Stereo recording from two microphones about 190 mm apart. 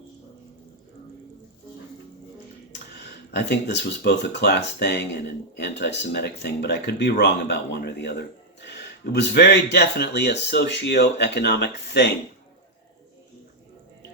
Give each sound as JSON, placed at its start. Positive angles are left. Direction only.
{"t": 2.7, "sound": "speech", "side_deg": 60}